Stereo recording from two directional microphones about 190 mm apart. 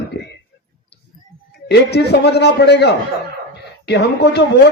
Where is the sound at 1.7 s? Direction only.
60° left (ahead or behind).